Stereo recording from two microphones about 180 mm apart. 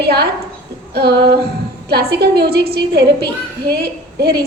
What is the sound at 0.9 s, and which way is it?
A woman's voice, 60° right (ahead or behind).